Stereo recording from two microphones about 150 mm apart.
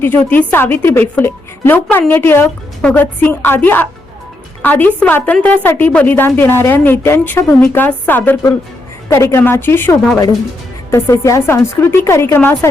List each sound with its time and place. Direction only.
0.0 s a woman's voice: 10° left (ahead or behind)